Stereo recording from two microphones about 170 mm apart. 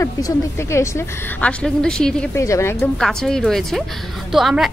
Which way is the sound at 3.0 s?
5° left (ahead or behind).